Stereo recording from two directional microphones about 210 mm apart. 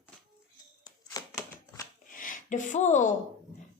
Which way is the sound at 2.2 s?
40° left (ahead or behind).